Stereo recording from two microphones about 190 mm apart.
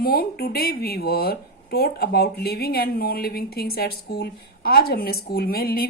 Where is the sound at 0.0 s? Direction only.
55° left (ahead or behind).